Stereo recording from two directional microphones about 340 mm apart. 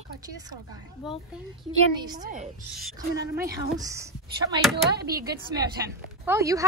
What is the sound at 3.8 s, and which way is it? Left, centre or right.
A woman's voice, centre.